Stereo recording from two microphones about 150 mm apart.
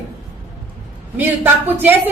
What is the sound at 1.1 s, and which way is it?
Speech, 10° right (ahead or behind).